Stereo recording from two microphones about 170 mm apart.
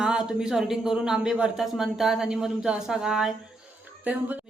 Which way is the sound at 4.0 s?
10° right (ahead or behind).